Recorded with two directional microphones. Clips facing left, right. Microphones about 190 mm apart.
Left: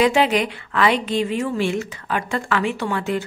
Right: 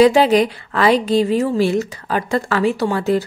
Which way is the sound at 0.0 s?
35° right (ahead or behind).